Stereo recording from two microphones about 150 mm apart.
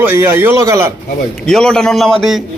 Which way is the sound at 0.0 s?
15° right (ahead or behind).